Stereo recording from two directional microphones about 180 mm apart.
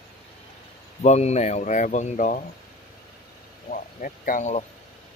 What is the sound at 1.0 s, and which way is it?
Speech, 40° left (ahead or behind).